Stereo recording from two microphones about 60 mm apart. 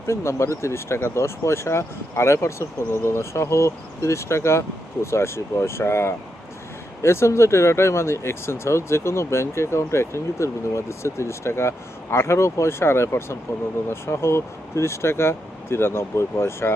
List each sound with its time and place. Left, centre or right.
0.1 s speech: left